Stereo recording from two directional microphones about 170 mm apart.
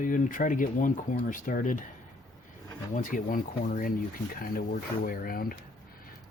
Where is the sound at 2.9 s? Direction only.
50° left (ahead or behind).